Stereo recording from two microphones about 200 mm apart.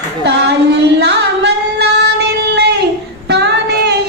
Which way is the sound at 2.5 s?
55° right (ahead or behind).